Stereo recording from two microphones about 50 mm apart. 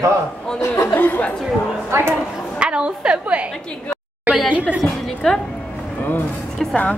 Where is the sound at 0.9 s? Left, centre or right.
Left.